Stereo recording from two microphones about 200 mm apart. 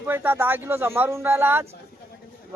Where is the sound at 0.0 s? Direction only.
10° right (ahead or behind).